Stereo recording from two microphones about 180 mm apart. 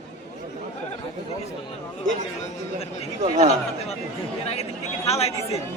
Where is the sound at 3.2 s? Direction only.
35° right (ahead or behind).